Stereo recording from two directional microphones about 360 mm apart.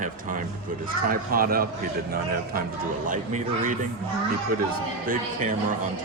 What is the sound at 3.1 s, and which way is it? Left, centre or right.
Speech, right.